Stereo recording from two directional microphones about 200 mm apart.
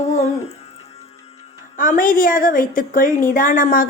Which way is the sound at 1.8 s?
45° left (ahead or behind).